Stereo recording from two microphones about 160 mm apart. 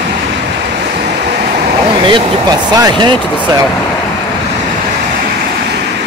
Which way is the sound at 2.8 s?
30° right (ahead or behind).